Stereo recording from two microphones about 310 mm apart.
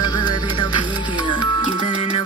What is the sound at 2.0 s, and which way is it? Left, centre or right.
Music, centre.